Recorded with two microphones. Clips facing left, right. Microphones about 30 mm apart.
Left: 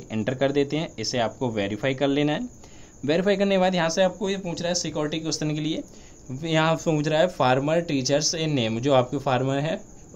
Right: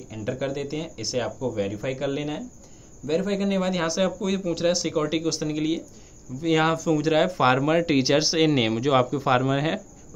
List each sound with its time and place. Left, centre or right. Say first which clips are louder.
0.2 s speech: left 5 dB; left
1.4 s a man's voice: left 2 dB; left
3.3 s speech: left 4 dB; left
3.7 s speech: left 2 dB; centre
4.6 s speech: right 3 dB; centre
7.1 s speech: right 1 dB; centre
7.8 s speech: right 3 dB; right
8.5 s speech: right 1 dB; centre